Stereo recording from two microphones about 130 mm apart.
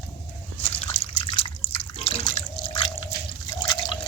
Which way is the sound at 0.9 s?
45° left (ahead or behind).